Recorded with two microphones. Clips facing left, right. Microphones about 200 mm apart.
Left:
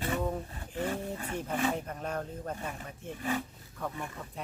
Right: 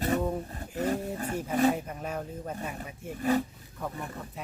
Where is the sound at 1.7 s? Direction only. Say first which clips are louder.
Right 1 dB; 5° right (ahead or behind).